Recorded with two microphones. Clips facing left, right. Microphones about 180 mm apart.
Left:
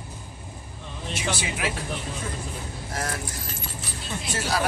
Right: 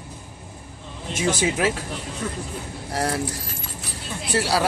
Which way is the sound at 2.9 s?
30° right (ahead or behind).